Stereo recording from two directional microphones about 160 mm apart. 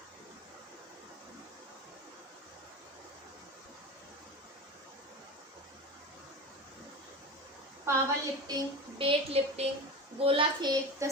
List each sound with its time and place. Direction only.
7.9 s a child's voice: 20° right (ahead or behind)
9.0 s a woman's voice: 35° right (ahead or behind)